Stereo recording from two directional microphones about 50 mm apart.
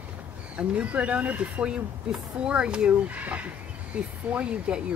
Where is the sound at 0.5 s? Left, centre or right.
Right.